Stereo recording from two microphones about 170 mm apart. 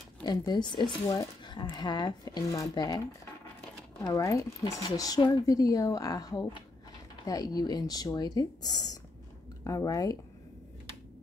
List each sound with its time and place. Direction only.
0.2 s speech: 25° left (ahead or behind)
4.0 s speech: 20° left (ahead or behind)